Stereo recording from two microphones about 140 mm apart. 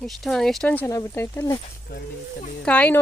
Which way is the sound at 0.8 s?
20° left (ahead or behind).